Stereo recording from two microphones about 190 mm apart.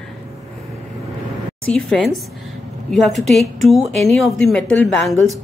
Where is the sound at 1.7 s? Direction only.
5° left (ahead or behind).